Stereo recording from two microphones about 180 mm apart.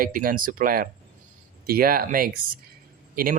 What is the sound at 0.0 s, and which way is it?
Speech, 50° right (ahead or behind).